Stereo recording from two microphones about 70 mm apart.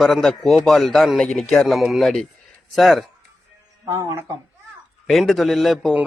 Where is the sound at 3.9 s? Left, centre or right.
Right.